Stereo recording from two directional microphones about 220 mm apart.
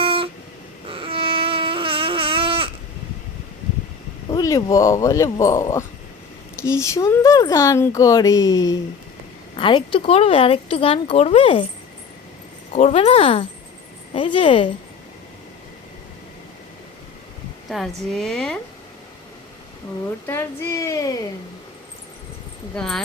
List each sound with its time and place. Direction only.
0.0 s a sound: 25° right (ahead or behind)
4.3 s speech: 15° left (ahead or behind)
12.7 s speech: 30° left (ahead or behind)
17.7 s a woman's voice: centre (ahead or behind)
20.2 s speech: 10° left (ahead or behind)
22.7 s a woman's voice: 5° left (ahead or behind)